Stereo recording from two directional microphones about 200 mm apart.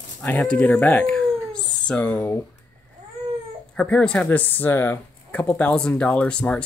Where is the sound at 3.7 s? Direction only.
5° left (ahead or behind).